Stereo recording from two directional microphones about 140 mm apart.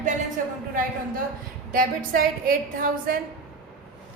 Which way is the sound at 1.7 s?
80° right.